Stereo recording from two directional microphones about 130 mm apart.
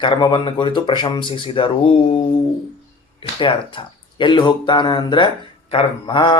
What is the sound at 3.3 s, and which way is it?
Speech, 40° left (ahead or behind).